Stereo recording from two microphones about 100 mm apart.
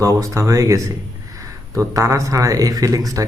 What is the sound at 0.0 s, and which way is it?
Speech, 35° right (ahead or behind).